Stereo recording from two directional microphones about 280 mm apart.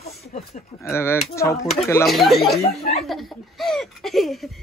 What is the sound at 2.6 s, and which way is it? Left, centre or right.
Speech, left.